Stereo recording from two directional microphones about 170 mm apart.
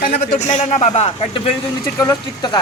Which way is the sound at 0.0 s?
50° left (ahead or behind).